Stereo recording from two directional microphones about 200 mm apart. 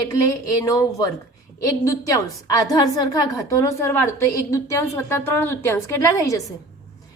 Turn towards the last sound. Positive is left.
turn(degrees=15)  # may be behind; listen again after turning